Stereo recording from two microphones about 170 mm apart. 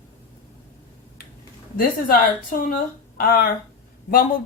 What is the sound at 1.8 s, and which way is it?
A woman's voice, 55° left (ahead or behind).